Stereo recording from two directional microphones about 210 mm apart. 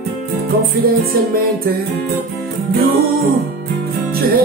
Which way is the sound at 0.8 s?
45° right (ahead or behind).